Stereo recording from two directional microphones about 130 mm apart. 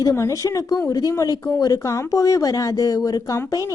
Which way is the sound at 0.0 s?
20° left (ahead or behind).